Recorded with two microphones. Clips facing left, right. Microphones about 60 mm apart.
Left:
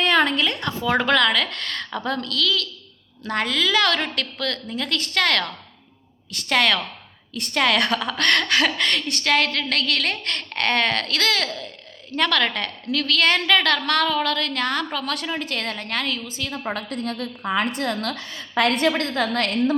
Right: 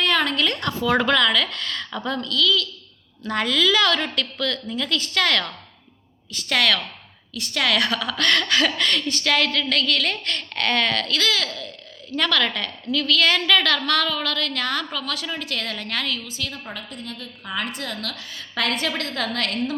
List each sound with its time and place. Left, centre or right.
0.0 s a sound: left
1.0 s speech: left
2.2 s a woman's voice: left
3.2 s a woman's voice: left
3.8 s speech: left
6.5 s a woman's voice: left
7.3 s a woman's voice: left
9.7 s speech: left
11.4 s a woman's voice: left
14.1 s a woman's voice: left
15.3 s a woman's voice: left
16.9 s a woman's voice: left
17.4 s a woman's voice: left
18.5 s a woman's voice: left